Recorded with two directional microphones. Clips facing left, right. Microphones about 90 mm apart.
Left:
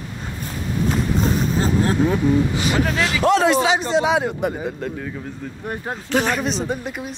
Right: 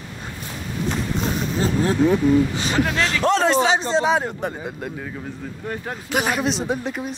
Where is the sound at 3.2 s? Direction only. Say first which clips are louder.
Left 2 dB; 35° right (ahead or behind).